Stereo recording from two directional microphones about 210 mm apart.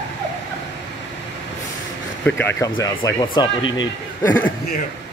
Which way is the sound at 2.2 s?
10° left (ahead or behind).